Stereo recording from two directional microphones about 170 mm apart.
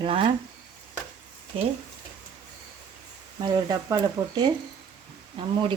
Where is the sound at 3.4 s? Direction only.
25° right (ahead or behind).